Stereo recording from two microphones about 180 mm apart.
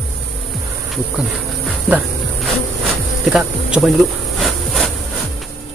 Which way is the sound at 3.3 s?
5° right (ahead or behind).